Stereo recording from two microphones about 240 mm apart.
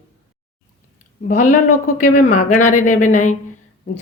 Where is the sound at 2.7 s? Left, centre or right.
Left.